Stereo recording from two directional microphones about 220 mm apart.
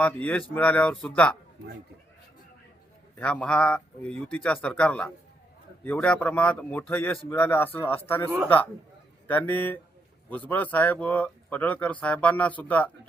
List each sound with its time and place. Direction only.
0.0 s speech: 5° left (ahead or behind)
3.2 s speech: 5° left (ahead or behind)